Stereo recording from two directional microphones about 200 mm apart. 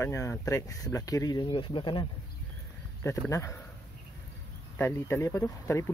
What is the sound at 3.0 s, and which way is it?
Speech, 15° left (ahead or behind).